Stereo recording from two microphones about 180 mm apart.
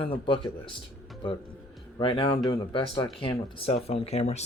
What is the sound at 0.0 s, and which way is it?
Speech, 30° left (ahead or behind).